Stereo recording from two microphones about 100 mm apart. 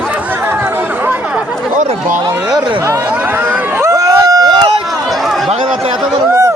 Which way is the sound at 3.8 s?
35° right (ahead or behind).